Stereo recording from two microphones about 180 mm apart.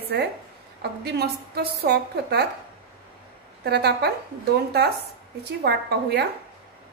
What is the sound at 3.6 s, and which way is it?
Speech, 65° right (ahead or behind).